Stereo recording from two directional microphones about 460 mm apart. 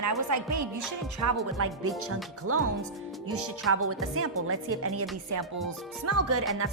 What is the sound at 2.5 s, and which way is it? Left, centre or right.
Speech, right.